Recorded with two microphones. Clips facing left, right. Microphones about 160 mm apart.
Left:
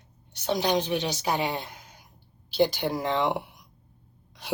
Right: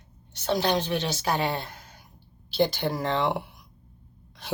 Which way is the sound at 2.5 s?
10° left (ahead or behind).